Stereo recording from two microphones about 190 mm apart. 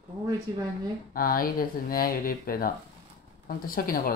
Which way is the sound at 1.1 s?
50° left (ahead or behind).